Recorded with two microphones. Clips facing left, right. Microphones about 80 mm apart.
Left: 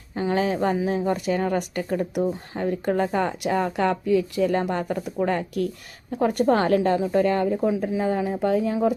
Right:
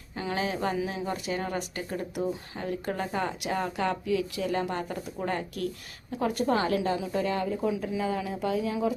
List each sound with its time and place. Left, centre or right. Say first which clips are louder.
0.2 s speech: left 7 dB; left
6.1 s speech: left 6 dB; left